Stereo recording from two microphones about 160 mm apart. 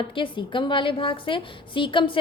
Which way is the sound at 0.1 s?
30° left (ahead or behind).